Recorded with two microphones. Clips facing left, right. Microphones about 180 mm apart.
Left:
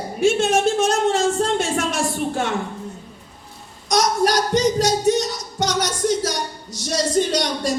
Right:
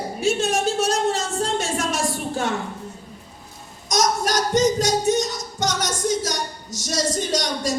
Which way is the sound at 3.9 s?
45° right (ahead or behind).